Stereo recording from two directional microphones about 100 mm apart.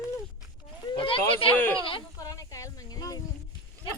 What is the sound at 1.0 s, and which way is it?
Speech, 65° left (ahead or behind).